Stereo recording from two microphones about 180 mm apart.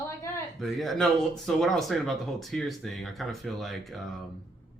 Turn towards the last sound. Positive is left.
turn(degrees=0)  # may be behind; listen again after turning